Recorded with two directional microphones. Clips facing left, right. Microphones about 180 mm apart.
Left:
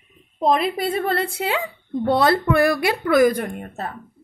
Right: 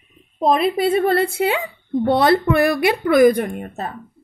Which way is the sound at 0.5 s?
25° right (ahead or behind).